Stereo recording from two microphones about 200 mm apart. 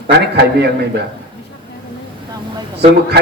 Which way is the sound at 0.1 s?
55° right (ahead or behind).